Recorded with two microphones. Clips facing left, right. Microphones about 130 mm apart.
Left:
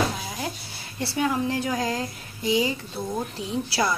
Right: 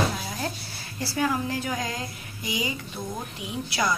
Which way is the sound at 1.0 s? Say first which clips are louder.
Left 2 dB; 25° left (ahead or behind).